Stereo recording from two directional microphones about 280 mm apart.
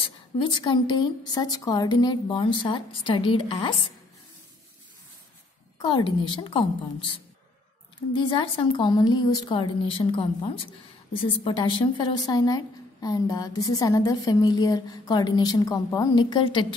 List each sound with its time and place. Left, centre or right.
0.4 s a woman's voice: centre
5.8 s a woman's voice: centre